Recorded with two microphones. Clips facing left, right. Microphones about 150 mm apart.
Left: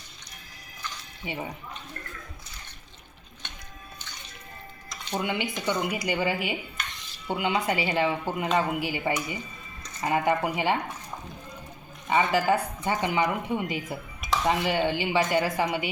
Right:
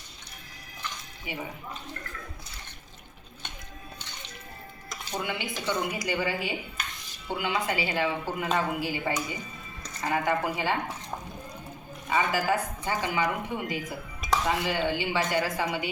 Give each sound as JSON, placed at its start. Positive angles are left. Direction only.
{"t": 5.1, "sound": "speech", "side_deg": 20}
{"t": 12.0, "sound": "speech", "side_deg": 25}